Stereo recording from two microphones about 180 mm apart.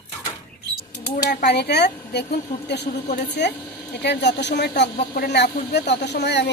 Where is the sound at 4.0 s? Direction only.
70° left (ahead or behind).